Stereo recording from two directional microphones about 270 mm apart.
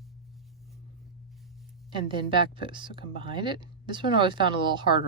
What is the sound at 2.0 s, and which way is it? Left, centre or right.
Speech, centre.